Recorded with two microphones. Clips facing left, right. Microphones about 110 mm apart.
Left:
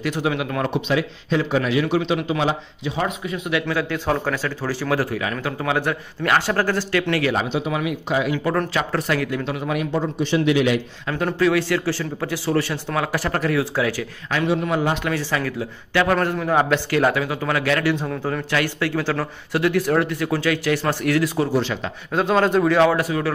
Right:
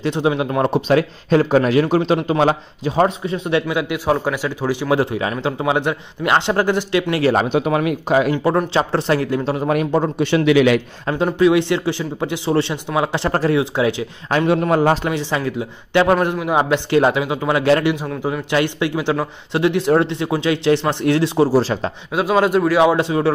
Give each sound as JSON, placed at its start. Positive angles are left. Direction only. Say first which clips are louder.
{"t": 0.0, "sound": "a man's voice", "louder": "right 4 dB", "side_deg": -25}
{"t": 0.9, "sound": "a man's voice", "louder": "right 7 dB", "side_deg": -50}
{"t": 3.6, "sound": "a man's voice", "louder": "right 3 dB", "side_deg": -10}
{"t": 7.3, "sound": "a man's voice", "louder": "right 6 dB", "side_deg": -55}
{"t": 8.7, "sound": "speech", "louder": "right 5 dB", "side_deg": -30}
{"t": 10.1, "sound": "a man's voice", "louder": "right 4 dB", "side_deg": -80}
{"t": 11.2, "sound": "a man's voice", "louder": "right 4 dB", "side_deg": -20}
{"t": 14.5, "sound": "a man's voice", "louder": "right 6 dB", "side_deg": -50}
{"t": 15.0, "sound": "a man's voice", "louder": "right 3 dB", "side_deg": -20}
{"t": 17.9, "sound": "a man's voice", "louder": "even", "side_deg": -5}
{"t": 18.5, "sound": "a man's voice", "louder": "right 5 dB", "side_deg": -20}
{"t": 22.1, "sound": "speech", "louder": "right 2 dB", "side_deg": -5}
{"t": 22.8, "sound": "a man's voice", "louder": "right 4 dB", "side_deg": -25}